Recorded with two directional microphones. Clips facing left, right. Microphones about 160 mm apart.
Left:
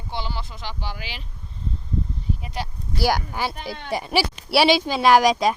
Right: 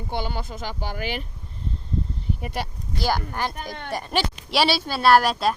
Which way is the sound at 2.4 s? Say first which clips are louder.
Right 1 dB; 60° right (ahead or behind).